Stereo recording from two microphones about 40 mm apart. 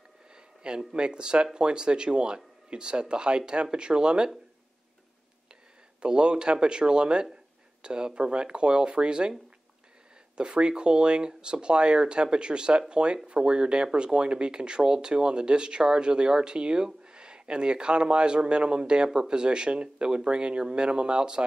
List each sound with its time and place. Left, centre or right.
0.3 s speech: centre
5.9 s speech: right
10.3 s speech: right